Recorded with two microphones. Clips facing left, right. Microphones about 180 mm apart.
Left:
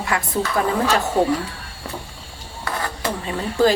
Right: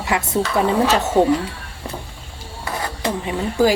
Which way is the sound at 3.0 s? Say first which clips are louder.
Right 5 dB; 15° right (ahead or behind).